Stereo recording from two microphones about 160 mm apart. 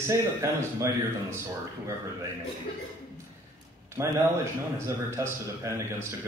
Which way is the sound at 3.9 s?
15° right (ahead or behind).